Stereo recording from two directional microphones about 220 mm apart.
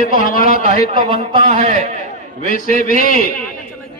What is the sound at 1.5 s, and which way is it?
Speech, 30° right (ahead or behind).